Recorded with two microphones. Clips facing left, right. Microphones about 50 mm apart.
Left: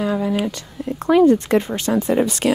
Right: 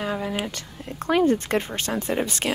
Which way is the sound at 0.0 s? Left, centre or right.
Right.